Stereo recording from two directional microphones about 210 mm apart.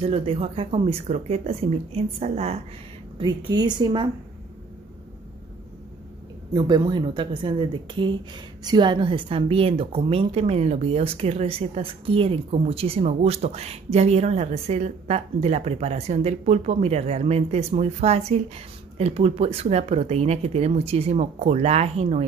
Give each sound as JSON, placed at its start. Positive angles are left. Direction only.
{"t": 0.0, "sound": "a woman's voice", "side_deg": -25}
{"t": 6.5, "sound": "a woman's voice", "side_deg": -20}